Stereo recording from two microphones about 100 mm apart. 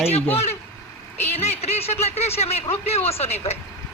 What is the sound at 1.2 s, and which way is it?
Speech, 90° left.